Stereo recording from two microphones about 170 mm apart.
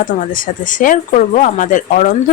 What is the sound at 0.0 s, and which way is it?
Speech, 55° left (ahead or behind).